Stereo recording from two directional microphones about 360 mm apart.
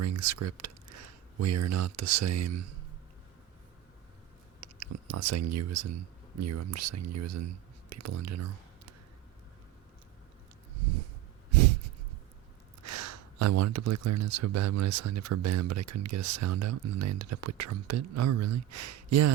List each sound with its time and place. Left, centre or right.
0.0 s speech: right
4.8 s speech: right
12.8 s a sound: right
14.4 s speech: right